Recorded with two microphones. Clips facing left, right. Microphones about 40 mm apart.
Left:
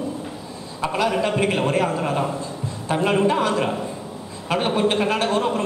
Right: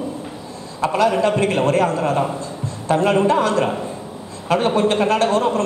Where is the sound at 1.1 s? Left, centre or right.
Centre.